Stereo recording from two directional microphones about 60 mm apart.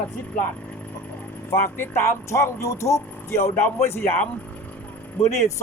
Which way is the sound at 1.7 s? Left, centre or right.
Left.